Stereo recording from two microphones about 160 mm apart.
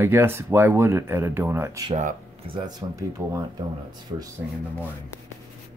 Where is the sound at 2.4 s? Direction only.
30° right (ahead or behind).